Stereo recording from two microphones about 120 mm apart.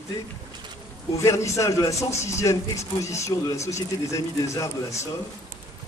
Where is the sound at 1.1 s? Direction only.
25° left (ahead or behind).